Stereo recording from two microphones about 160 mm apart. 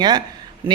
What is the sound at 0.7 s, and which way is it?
Speech, 15° right (ahead or behind).